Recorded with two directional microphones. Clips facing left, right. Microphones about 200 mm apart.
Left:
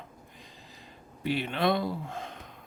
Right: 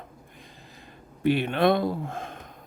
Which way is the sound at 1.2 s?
55° right (ahead or behind).